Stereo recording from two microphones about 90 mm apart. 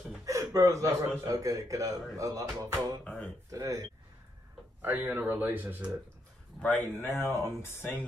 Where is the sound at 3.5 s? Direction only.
40° right (ahead or behind).